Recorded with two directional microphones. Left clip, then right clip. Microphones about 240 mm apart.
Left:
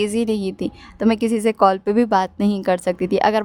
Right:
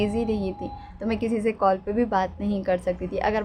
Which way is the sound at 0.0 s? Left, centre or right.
Left.